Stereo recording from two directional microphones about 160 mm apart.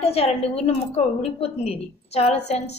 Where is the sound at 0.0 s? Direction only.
40° left (ahead or behind).